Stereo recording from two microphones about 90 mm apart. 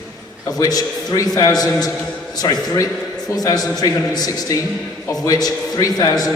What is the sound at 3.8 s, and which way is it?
A man's voice, 45° left (ahead or behind).